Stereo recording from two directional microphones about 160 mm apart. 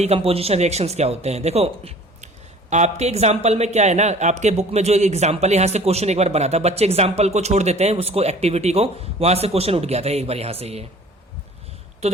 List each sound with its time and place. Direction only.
0.0 s speech: 40° right (ahead or behind)
12.0 s speech: 45° right (ahead or behind)